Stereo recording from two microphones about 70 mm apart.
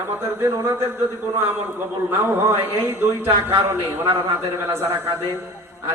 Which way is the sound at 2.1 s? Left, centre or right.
Right.